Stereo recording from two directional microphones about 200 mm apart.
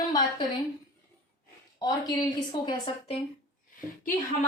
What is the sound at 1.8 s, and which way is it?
A woman's voice, 20° left (ahead or behind).